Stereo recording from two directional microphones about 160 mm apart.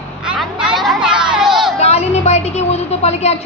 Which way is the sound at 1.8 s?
40° left (ahead or behind).